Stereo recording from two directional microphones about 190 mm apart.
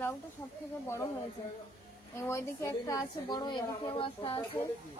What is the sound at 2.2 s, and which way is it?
A woman's voice, 15° left (ahead or behind).